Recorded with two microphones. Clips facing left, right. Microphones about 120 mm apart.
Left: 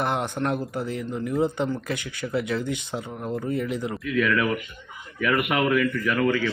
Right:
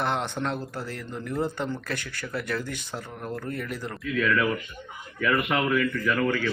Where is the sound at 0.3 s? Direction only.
10° left (ahead or behind).